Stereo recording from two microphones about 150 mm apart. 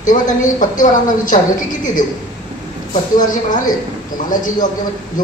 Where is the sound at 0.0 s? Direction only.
60° left (ahead or behind).